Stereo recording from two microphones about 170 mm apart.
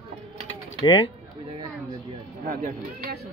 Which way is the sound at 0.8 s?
25° left (ahead or behind).